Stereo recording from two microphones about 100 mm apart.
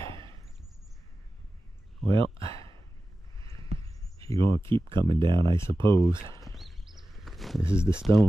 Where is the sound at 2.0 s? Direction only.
70° right (ahead or behind).